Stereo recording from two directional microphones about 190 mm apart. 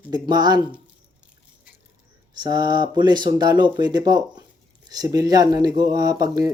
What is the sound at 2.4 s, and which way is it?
Speech, 20° right (ahead or behind).